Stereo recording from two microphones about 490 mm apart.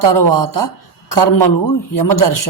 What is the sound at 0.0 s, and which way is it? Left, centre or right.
Speech, left.